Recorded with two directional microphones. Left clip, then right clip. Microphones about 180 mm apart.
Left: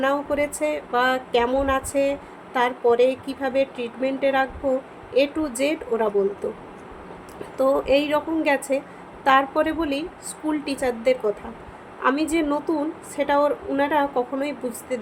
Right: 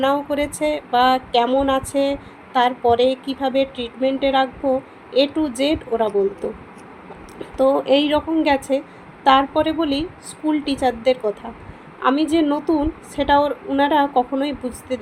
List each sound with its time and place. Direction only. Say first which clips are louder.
0.0 s speech: right 3 dB; 20° right (ahead or behind)
7.5 s speech: right 3 dB; 20° right (ahead or behind)